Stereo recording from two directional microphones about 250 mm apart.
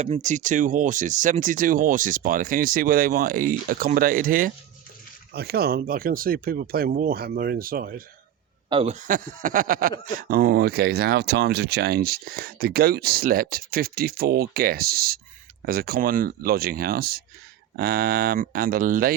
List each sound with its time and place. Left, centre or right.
0.0 s speech: right
8.7 s speech: right